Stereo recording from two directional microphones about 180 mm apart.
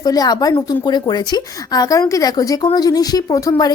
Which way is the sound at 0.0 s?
20° left (ahead or behind).